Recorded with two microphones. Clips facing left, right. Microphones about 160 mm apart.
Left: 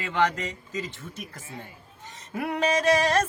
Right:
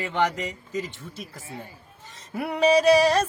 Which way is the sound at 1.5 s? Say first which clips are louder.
Right 2 dB; 30° right (ahead or behind).